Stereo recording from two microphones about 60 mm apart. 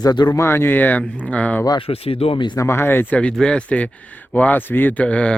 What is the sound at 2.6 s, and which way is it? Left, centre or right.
Speech, left.